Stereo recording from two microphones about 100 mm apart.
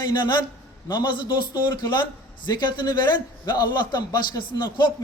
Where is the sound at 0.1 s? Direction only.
50° left (ahead or behind).